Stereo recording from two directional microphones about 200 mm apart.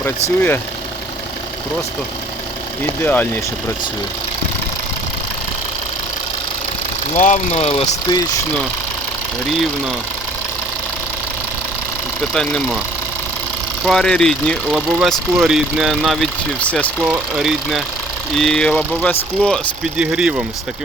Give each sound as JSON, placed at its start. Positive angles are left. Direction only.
{"t": 2.8, "sound": "speech", "side_deg": 10}
{"t": 7.1, "sound": "speech", "side_deg": 35}
{"t": 12.3, "sound": "speech", "side_deg": 5}
{"t": 13.8, "sound": "speech", "side_deg": 0}